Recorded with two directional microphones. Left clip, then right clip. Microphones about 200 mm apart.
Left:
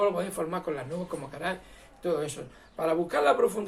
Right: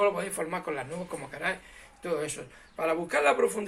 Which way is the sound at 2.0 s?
20° right (ahead or behind).